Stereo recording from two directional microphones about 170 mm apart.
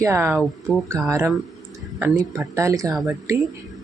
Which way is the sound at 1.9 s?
10° right (ahead or behind).